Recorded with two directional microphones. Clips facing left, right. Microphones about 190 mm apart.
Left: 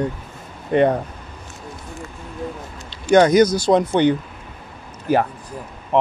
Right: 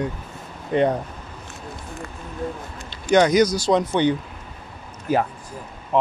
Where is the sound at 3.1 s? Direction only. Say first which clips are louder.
Left 3 dB; 50° left (ahead or behind).